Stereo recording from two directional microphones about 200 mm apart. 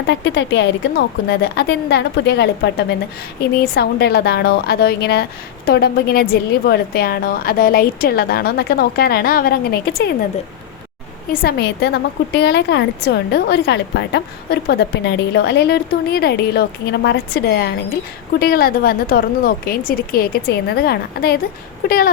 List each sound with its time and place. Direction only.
0.1 s a woman's voice: 60° left (ahead or behind)
11.3 s a woman's voice: 45° left (ahead or behind)